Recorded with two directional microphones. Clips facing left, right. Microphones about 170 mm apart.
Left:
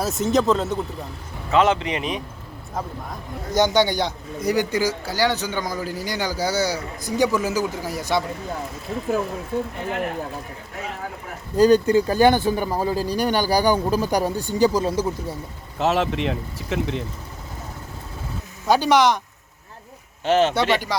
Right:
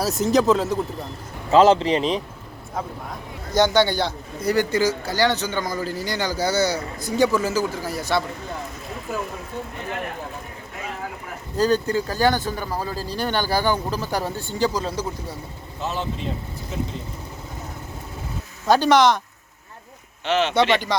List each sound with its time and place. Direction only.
0.0 s speech: centre (ahead or behind)
1.5 s speech: 30° right (ahead or behind)
3.5 s speech: 15° left (ahead or behind)
11.5 s speech: 15° left (ahead or behind)
15.8 s speech: 85° left
18.6 s speech: 10° left (ahead or behind)
20.2 s speech: 45° left (ahead or behind)
20.5 s speech: 5° left (ahead or behind)